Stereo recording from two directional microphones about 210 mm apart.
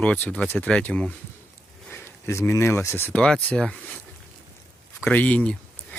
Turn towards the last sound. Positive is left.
turn(degrees=5)  # may be behind; listen again after turning